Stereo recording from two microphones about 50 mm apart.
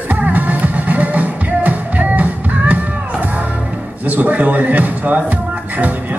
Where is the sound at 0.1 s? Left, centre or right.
Right.